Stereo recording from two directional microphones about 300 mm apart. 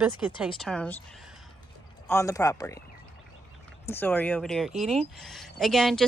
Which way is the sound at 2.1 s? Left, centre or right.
Centre.